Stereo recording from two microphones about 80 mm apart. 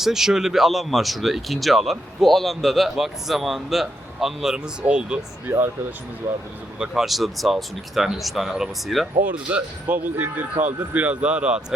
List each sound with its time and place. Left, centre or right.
0.0 s speech: centre
5.5 s speech: right
6.7 s speech: centre
9.2 s speech: centre